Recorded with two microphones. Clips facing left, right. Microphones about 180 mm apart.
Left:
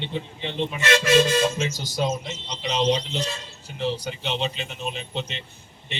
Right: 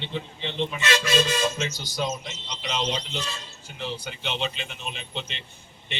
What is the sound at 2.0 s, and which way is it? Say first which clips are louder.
Speech: left 4 dB; 30° left (ahead or behind).